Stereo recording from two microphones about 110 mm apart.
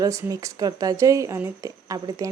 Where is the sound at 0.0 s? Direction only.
30° right (ahead or behind).